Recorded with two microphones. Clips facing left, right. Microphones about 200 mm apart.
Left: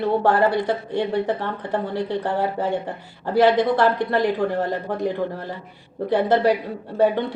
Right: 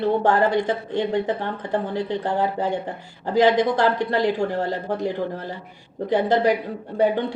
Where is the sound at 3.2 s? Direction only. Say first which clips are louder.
Left 1 dB; 15° right (ahead or behind).